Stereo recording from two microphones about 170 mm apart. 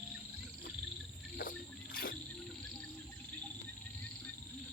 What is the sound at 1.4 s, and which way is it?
Cricket, 60° left (ahead or behind).